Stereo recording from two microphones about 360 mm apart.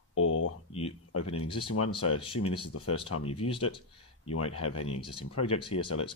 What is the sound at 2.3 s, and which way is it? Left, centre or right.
Speech, left.